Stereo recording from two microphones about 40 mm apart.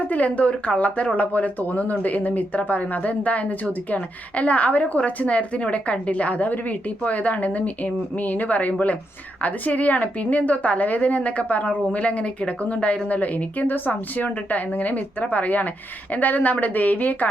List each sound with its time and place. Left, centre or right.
0.1 s a woman's voice: left